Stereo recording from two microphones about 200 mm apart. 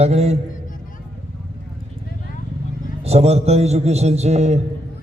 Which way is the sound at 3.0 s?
30° right (ahead or behind).